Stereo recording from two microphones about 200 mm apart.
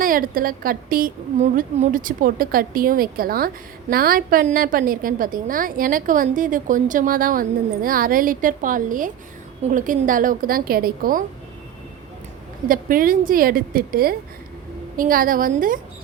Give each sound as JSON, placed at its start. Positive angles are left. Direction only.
{"t": 0.0, "sound": "a woman's voice", "side_deg": -45}
{"t": 12.6, "sound": "a woman's voice", "side_deg": -45}